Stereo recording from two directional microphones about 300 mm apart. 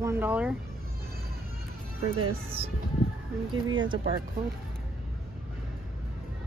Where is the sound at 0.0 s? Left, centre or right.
Centre.